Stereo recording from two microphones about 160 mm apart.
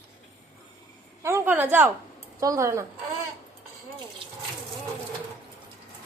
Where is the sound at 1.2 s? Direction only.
15° right (ahead or behind).